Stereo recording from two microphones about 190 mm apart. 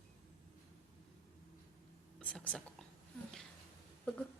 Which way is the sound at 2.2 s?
5° left (ahead or behind).